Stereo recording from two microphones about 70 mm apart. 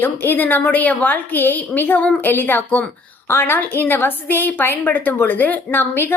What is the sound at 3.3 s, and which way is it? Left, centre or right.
A woman's voice, left.